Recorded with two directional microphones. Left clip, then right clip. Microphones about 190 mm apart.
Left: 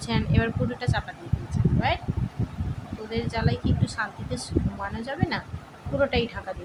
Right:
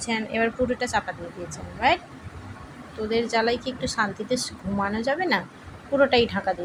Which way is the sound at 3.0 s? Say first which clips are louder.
Right 7 dB; 25° right (ahead or behind).